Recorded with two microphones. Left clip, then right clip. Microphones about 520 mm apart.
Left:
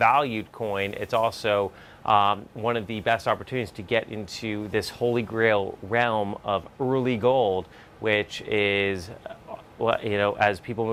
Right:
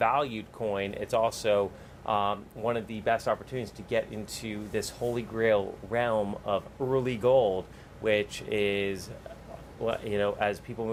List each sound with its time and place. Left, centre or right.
0.0 s speech: left